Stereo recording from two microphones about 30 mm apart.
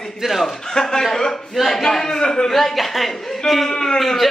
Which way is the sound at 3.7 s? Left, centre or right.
Centre.